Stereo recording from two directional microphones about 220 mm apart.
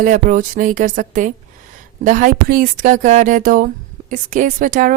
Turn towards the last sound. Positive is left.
turn(degrees=-35)  # may be behind; listen again after turning